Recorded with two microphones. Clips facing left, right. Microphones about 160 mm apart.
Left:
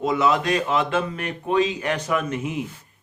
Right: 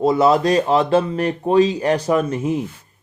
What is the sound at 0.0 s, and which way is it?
Speech, 35° right (ahead or behind).